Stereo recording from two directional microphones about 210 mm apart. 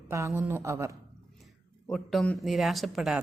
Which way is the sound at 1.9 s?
Centre (ahead or behind).